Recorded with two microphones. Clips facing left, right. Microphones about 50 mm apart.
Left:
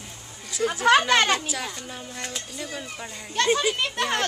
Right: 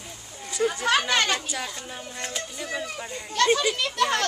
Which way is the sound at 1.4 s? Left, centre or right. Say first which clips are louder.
Left 1 dB; centre.